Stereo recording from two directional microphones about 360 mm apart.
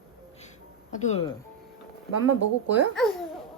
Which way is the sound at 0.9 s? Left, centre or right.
Centre.